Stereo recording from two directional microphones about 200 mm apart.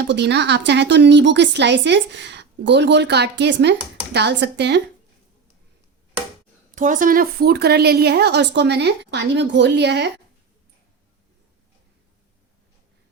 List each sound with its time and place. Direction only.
0.1 s a woman's voice: 60° right (ahead or behind)
6.7 s a woman's voice: 40° right (ahead or behind); by 10.1 s 60° right (ahead or behind)